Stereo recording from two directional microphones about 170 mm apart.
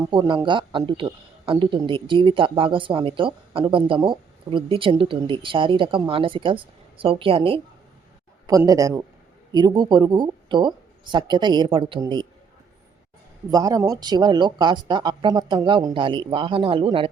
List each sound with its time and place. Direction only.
0.1 s speech: 25° right (ahead or behind)
8.4 s speech: 20° right (ahead or behind)
13.5 s speech: 20° right (ahead or behind)